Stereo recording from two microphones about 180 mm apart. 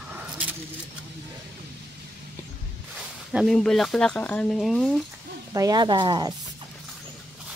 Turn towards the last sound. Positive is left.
turn(degrees=-25)  # may be behind; listen again after turning